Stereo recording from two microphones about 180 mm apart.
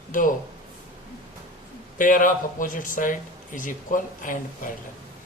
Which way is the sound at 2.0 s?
45° left (ahead or behind).